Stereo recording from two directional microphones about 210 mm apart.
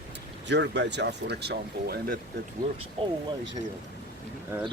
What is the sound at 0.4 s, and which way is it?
Speech, 55° right (ahead or behind).